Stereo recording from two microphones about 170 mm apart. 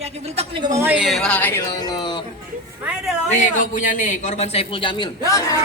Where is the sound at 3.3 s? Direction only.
45° left (ahead or behind); by 5.4 s 25° left (ahead or behind).